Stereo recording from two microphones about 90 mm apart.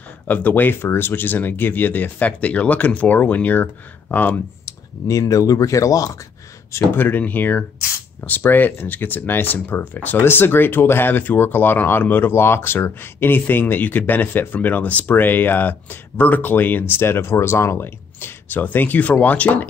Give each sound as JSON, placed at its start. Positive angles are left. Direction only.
{"t": 0.3, "sound": "speech", "side_deg": 20}
{"t": 4.6, "sound": "speech", "side_deg": 40}
{"t": 6.7, "sound": "speech", "side_deg": 20}